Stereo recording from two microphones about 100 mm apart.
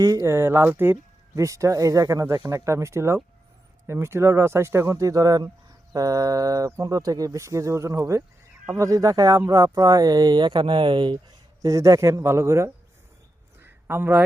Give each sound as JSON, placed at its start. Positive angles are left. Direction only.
{"t": 0.0, "sound": "speech", "side_deg": -35}
{"t": 1.4, "sound": "speech", "side_deg": -30}
{"t": 11.6, "sound": "speech", "side_deg": -35}
{"t": 13.6, "sound": "a sound", "side_deg": -20}